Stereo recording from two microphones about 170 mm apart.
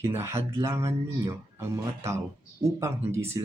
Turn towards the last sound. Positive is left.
turn(degrees=-15)  # may be behind; listen again after turning